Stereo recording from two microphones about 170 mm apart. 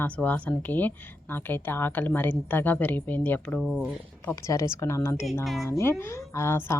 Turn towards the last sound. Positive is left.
turn(degrees=15)  # may be behind; listen again after turning